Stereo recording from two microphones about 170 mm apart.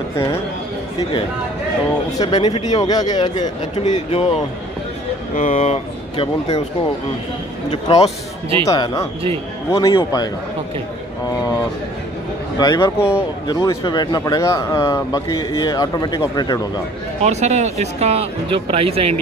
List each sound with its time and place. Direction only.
2.1 s speech: 25° left (ahead or behind)
3.8 s speech: 40° left (ahead or behind)
5.3 s speech: 40° left (ahead or behind)
7.7 s speech: 35° left (ahead or behind)
8.6 s speech: 20° left (ahead or behind)
12.5 s speech: 25° left (ahead or behind)
17.2 s speech: 40° right (ahead or behind)